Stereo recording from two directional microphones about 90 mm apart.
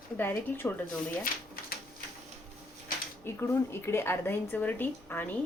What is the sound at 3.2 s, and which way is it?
Speech, 30° left (ahead or behind).